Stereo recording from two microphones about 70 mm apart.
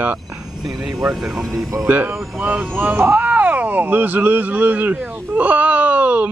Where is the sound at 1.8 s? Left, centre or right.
Right.